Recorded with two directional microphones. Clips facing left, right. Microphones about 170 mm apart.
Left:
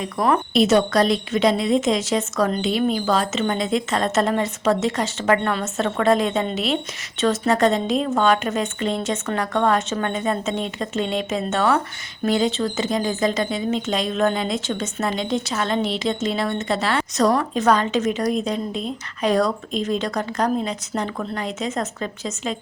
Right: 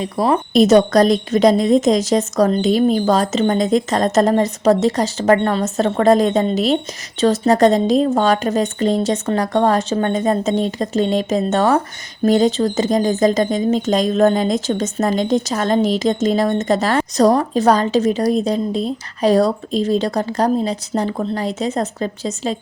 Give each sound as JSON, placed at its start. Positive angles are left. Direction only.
{"t": 0.0, "sound": "a woman's voice", "side_deg": -30}
{"t": 0.5, "sound": "speech", "side_deg": -40}